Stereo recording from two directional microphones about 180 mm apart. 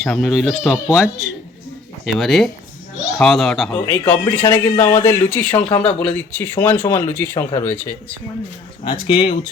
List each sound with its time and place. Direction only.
0.0 s speech: centre (ahead or behind)
2.0 s speech: centre (ahead or behind)
8.8 s speech: 25° left (ahead or behind)